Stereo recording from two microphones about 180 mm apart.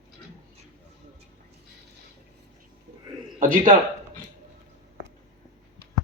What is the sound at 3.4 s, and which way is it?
Speech, 50° right (ahead or behind).